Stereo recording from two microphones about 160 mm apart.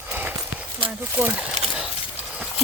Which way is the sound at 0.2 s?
10° right (ahead or behind).